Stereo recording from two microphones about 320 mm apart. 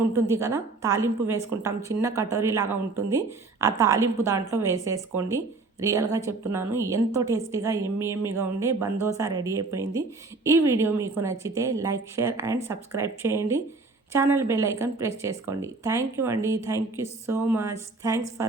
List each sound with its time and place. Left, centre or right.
0.1 s speech: centre